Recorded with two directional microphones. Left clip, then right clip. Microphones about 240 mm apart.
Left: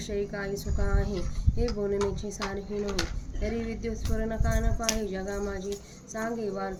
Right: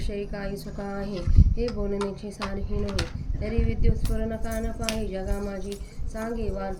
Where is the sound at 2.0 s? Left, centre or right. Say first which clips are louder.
Left 1 dB; centre.